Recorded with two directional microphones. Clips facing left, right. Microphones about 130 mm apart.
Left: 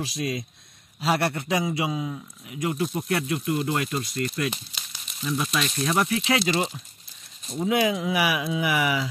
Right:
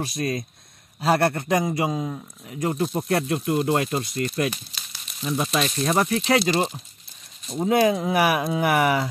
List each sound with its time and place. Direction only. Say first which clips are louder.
0.0 s speech: right 2 dB; 50° right (ahead or behind)